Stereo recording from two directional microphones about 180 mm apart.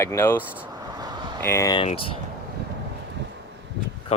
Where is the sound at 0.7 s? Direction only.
20° right (ahead or behind).